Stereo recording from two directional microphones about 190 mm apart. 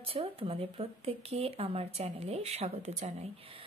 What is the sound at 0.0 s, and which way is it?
A woman's voice, 30° right (ahead or behind).